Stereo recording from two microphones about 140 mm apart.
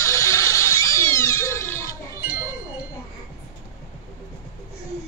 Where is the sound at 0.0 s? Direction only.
20° left (ahead or behind).